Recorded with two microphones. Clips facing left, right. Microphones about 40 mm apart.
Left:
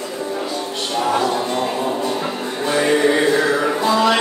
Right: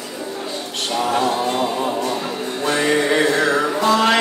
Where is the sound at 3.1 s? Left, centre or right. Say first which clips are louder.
Left 1 dB; centre.